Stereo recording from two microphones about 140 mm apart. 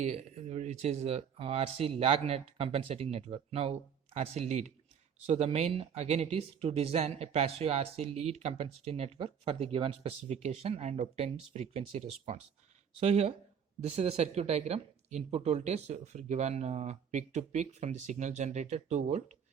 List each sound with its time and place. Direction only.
0.0 s speech: 50° right (ahead or behind)